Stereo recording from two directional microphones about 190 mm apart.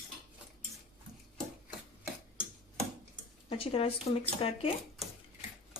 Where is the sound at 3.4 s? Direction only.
30° left (ahead or behind).